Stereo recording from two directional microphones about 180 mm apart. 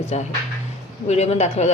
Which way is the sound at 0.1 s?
40° left (ahead or behind).